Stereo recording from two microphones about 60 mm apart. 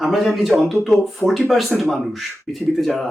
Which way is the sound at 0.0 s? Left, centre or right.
Centre.